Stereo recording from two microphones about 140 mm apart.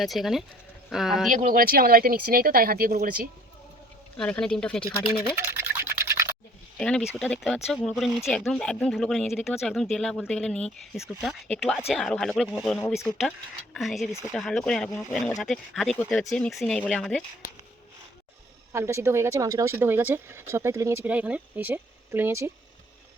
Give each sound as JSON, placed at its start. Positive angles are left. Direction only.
{"t": 0.0, "sound": "speech", "side_deg": 0}
{"t": 1.3, "sound": "speech", "side_deg": -70}
{"t": 4.2, "sound": "speech", "side_deg": 5}
{"t": 4.8, "sound": "speech", "side_deg": 40}
{"t": 5.3, "sound": "a sound", "side_deg": -15}
{"t": 6.7, "sound": "speech", "side_deg": 5}
{"t": 18.7, "sound": "speech", "side_deg": -20}